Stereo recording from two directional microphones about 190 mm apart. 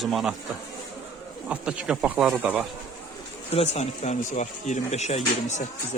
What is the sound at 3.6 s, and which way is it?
Speech, 35° left (ahead or behind).